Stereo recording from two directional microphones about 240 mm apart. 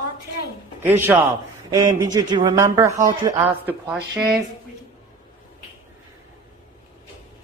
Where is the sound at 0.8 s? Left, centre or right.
Centre.